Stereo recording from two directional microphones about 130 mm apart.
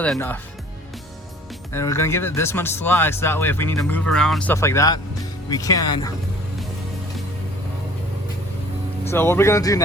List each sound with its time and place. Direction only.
1.7 s speech: 20° left (ahead or behind)
4.5 s speech: 20° left (ahead or behind)
9.0 s speech: 20° left (ahead or behind)